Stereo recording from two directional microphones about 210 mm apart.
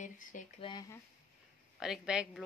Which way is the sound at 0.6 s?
20° left (ahead or behind).